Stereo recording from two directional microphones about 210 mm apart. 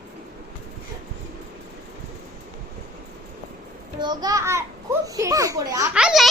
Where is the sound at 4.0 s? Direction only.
20° right (ahead or behind).